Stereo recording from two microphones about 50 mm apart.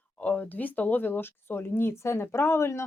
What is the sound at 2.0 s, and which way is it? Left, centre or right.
Speech, left.